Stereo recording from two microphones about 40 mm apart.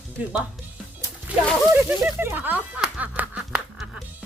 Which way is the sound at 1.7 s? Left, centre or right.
Right.